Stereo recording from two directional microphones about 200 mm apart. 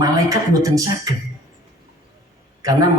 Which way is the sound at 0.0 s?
15° right (ahead or behind).